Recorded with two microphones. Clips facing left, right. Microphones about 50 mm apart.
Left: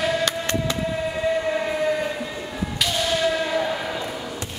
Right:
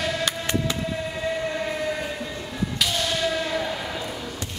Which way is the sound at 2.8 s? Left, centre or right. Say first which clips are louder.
Left 3 dB; centre.